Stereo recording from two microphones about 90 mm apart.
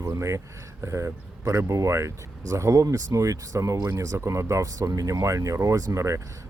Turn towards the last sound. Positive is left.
turn(degrees=-35)  # may be behind; listen again after turning